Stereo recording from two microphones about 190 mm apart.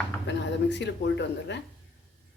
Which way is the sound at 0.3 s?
65° left (ahead or behind).